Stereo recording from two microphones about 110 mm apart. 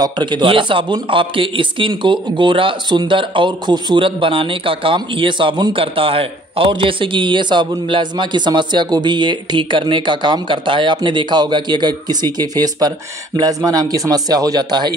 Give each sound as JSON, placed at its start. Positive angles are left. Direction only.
{"t": 0.0, "sound": "speech", "side_deg": -45}